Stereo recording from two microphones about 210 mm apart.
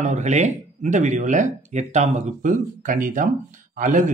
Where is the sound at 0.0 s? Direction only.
35° right (ahead or behind).